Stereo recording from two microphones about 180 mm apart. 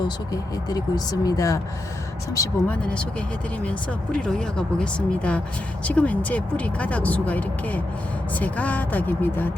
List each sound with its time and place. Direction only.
0.7 s speech: 20° left (ahead or behind)
2.8 s speech: 5° left (ahead or behind)